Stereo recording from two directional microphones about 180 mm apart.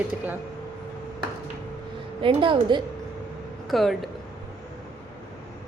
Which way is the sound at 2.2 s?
30° right (ahead or behind).